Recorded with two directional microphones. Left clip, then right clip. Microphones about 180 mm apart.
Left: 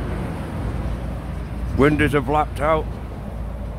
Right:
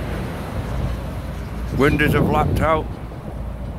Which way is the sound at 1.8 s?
15° left (ahead or behind).